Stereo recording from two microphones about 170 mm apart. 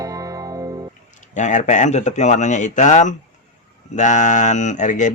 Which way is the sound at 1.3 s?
45° left (ahead or behind).